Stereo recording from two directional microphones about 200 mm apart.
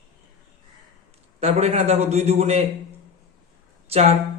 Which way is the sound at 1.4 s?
35° right (ahead or behind).